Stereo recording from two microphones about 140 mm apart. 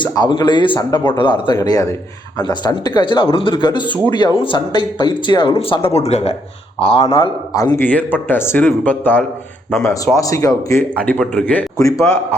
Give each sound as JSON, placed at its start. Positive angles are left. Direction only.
{"t": 0.0, "sound": "speech", "side_deg": 30}
{"t": 1.5, "sound": "speech", "side_deg": 25}
{"t": 7.5, "sound": "speech", "side_deg": 25}
{"t": 7.8, "sound": "a man's voice", "side_deg": 10}
{"t": 10.2, "sound": "speech", "side_deg": 25}
{"t": 11.0, "sound": "a man's voice", "side_deg": 10}
{"t": 11.8, "sound": "speech", "side_deg": 25}